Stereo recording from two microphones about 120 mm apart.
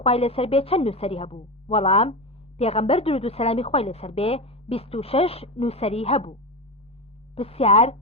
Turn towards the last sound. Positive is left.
turn(degrees=60)  # may be behind; listen again after turning